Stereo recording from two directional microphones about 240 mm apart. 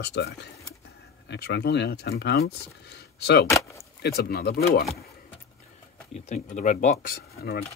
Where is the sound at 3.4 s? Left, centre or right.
Centre.